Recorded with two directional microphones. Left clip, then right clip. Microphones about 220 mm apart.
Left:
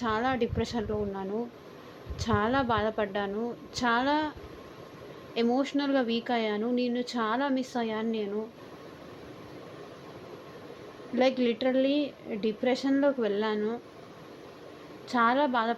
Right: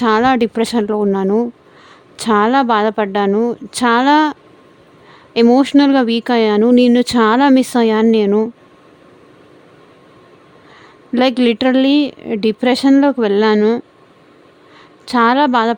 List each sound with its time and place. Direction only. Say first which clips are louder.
0.0 s a woman's voice: right 16 dB; 45° right (ahead or behind)
11.1 s speech: right 12 dB; 45° right (ahead or behind)
15.0 s a woman's voice: right 13 dB; 40° right (ahead or behind)